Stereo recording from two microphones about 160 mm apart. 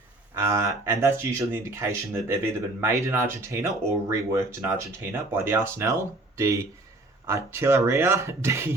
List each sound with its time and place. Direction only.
0.3 s speech: 20° right (ahead or behind)